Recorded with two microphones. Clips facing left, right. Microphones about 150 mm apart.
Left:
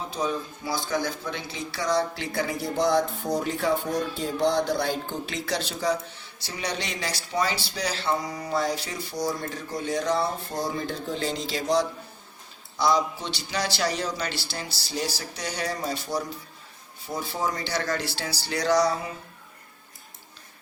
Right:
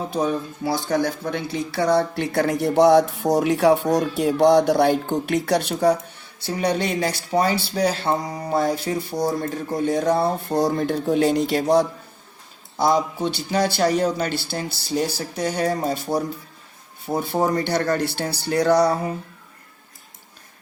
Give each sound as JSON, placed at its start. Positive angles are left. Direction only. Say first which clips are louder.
{"t": 0.1, "sound": "speech", "louder": "right 5 dB", "side_deg": -60}